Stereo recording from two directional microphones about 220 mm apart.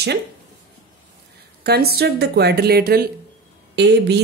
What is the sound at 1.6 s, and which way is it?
A woman's voice, 45° right (ahead or behind).